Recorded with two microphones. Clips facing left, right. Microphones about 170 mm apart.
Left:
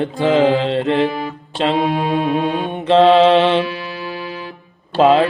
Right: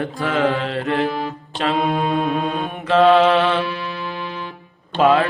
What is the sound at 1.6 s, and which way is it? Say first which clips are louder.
Music: left 4 dB; 25° left (ahead or behind).